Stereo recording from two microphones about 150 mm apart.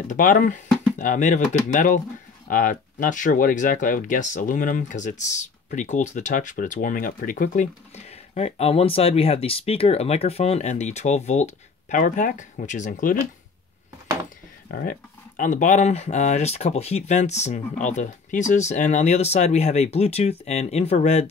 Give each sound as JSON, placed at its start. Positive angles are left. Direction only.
{"t": 0.1, "sound": "speech", "side_deg": 65}
{"t": 14.7, "sound": "speech", "side_deg": 80}